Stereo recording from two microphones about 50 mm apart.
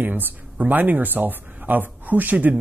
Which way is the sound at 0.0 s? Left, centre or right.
Right.